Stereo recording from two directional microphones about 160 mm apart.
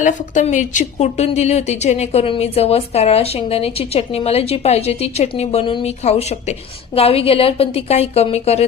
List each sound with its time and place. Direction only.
0.0 s a woman's voice: 50° left (ahead or behind)